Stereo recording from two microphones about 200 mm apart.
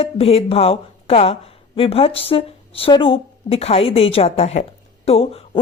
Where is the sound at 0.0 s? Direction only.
30° left (ahead or behind).